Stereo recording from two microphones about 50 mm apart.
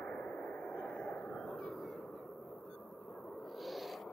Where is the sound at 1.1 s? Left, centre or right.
Centre.